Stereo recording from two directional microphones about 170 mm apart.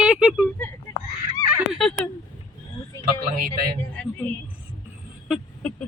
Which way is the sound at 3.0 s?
55° right (ahead or behind).